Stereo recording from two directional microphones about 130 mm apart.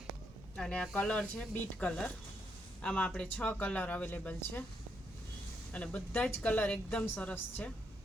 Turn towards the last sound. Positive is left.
turn(degrees=10)  # may be behind; listen again after turning